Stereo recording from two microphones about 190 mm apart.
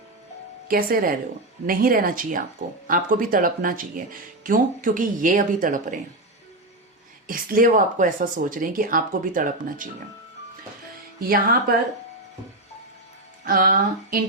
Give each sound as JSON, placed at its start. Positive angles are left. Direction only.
{"t": 0.7, "sound": "speech", "side_deg": -50}
{"t": 7.3, "sound": "speech", "side_deg": -45}
{"t": 11.2, "sound": "speech", "side_deg": -50}
{"t": 13.4, "sound": "speech", "side_deg": -50}